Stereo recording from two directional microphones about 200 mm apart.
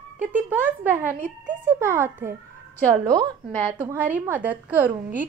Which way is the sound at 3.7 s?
10° right (ahead or behind).